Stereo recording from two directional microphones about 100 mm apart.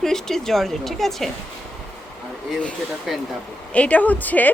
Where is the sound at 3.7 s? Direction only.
15° left (ahead or behind).